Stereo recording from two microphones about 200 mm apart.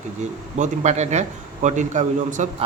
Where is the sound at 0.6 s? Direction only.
35° right (ahead or behind).